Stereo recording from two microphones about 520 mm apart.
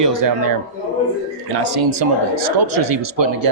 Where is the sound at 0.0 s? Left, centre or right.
Right.